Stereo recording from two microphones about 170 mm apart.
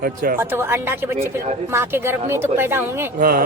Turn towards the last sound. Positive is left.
turn(degrees=-60)  # may be behind; listen again after turning